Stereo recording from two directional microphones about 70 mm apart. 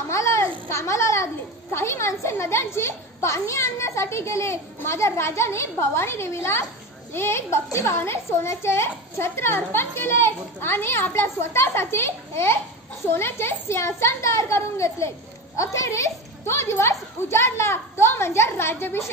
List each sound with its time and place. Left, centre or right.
0.1 s a child's voice: left
16.4 s a woman's voice: left